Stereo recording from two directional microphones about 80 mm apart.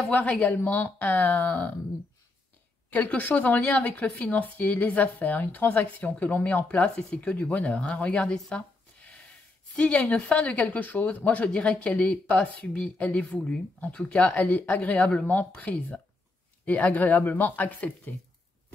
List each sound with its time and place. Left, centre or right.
0.1 s speech: centre
2.9 s speech: left
9.8 s speech: centre